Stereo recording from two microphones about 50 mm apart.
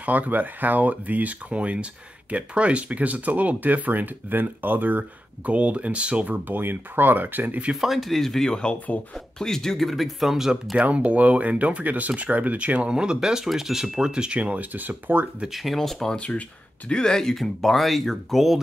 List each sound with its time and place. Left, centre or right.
0.0 s speech: right
6.3 s speech: right
7.7 s speech: centre
10.8 s speech: right
14.4 s speech: right
15.5 s speech: centre
16.2 s speech: left
16.9 s speech: centre